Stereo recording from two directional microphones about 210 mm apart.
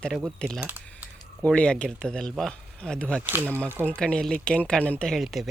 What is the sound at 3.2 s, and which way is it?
Speech, 10° right (ahead or behind).